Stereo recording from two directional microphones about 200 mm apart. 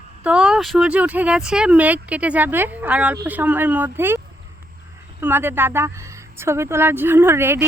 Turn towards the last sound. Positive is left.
turn(degrees=-10)  # may be behind; listen again after turning